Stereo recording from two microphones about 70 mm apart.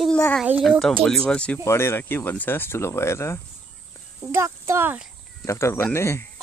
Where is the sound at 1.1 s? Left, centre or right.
Centre.